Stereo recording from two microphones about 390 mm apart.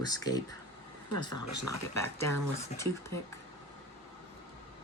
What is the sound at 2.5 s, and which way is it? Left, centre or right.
Speech, centre.